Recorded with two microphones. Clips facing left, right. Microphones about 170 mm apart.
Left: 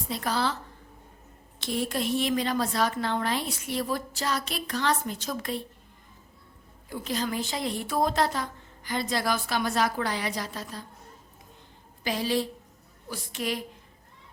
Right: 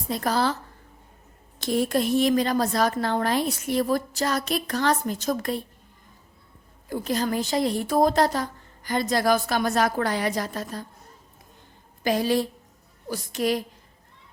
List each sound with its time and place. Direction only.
0.1 s a woman's voice: 45° right (ahead or behind)
1.6 s a woman's voice: 45° right (ahead or behind)
6.9 s a woman's voice: 45° right (ahead or behind)
12.0 s a woman's voice: 50° right (ahead or behind)